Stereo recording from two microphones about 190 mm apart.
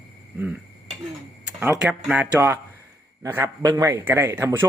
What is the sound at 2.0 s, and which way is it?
Speech, 10° right (ahead or behind).